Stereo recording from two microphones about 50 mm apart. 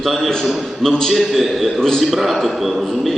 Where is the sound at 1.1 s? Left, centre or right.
Centre.